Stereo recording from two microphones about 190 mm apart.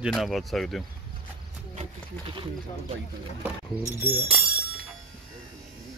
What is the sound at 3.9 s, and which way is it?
Speech, 10° right (ahead or behind).